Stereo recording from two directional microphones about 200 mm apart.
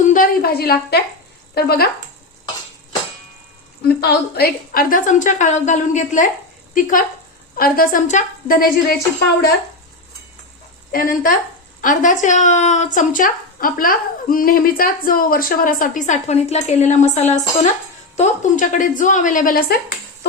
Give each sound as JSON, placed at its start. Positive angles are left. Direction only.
{"t": 0.1, "sound": "a sound", "side_deg": 45}
{"t": 1.5, "sound": "a woman's voice", "side_deg": 50}
{"t": 3.8, "sound": "speech", "side_deg": 50}
{"t": 7.5, "sound": "a woman's voice", "side_deg": 45}
{"t": 10.9, "sound": "a woman's voice", "side_deg": 45}